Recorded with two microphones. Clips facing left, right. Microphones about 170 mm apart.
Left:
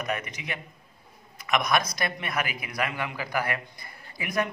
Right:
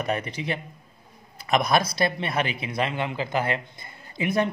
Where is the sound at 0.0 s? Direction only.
30° right (ahead or behind).